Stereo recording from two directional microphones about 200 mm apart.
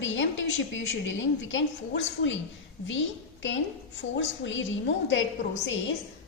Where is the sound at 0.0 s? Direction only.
70° left (ahead or behind).